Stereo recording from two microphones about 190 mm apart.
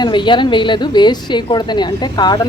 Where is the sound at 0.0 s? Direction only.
25° left (ahead or behind).